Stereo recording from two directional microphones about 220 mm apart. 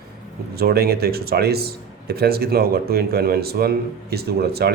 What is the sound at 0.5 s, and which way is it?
Speech, 45° right (ahead or behind).